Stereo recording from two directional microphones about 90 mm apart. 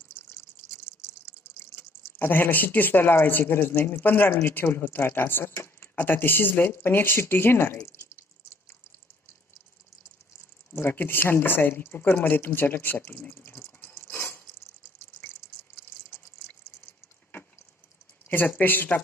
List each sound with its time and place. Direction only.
1.7 s speech: 25° left (ahead or behind)
10.8 s speech: 25° left (ahead or behind)
13.4 s drip: 30° left (ahead or behind)
18.3 s speech: 20° left (ahead or behind)